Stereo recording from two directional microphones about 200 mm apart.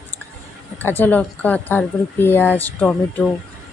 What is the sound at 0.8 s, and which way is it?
Speech, 10° left (ahead or behind).